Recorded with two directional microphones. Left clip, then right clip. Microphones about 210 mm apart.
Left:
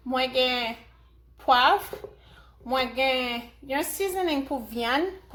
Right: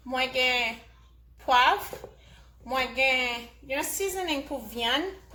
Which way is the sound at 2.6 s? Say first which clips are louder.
Left 1 dB; 35° left (ahead or behind).